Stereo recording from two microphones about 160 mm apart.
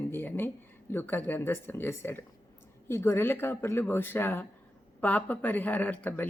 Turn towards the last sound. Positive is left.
turn(degrees=10)  # may be behind; listen again after turning